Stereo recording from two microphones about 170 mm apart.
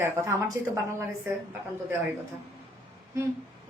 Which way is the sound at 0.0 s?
15° right (ahead or behind).